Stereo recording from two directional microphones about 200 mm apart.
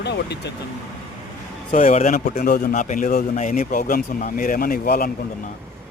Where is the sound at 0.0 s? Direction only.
60° left (ahead or behind).